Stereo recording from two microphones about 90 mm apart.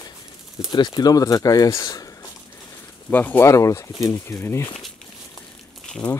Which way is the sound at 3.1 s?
20° left (ahead or behind).